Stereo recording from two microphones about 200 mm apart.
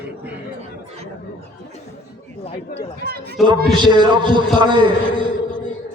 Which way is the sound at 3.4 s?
Centre (ahead or behind).